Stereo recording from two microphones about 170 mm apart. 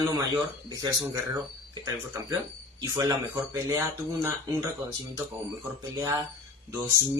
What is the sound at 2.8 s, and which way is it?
Speech, 20° right (ahead or behind).